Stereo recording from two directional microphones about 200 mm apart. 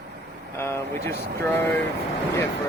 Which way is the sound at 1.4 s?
10° left (ahead or behind).